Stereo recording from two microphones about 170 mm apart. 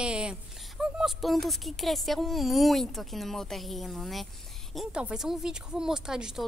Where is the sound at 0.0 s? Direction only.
5° right (ahead or behind).